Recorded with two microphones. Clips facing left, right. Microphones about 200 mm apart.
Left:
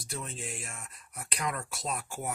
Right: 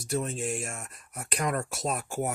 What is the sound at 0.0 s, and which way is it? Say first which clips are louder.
Speech: right 10 dB; 45° right (ahead or behind).